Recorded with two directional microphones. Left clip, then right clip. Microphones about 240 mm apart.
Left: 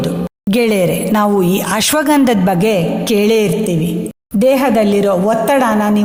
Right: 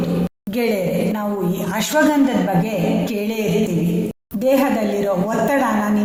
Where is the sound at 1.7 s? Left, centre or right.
Left.